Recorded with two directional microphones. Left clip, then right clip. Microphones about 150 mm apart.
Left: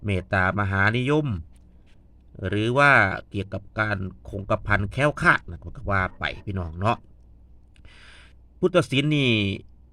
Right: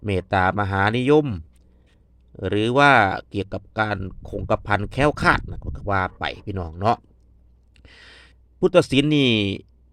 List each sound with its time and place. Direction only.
0.0 s speech: 40° right (ahead or behind)
2.3 s speech: 45° right (ahead or behind)
7.8 s a sound: 35° right (ahead or behind)